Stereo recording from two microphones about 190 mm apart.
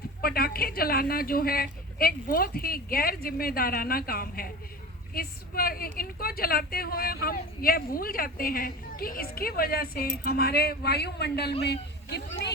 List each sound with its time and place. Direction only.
0.2 s a woman's voice: 50° left (ahead or behind)